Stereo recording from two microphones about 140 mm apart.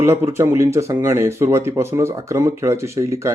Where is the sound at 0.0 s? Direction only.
20° right (ahead or behind).